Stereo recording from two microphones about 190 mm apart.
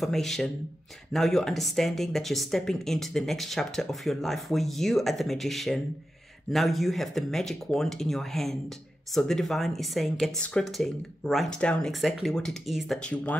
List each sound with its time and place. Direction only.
0.0 s speech: centre (ahead or behind)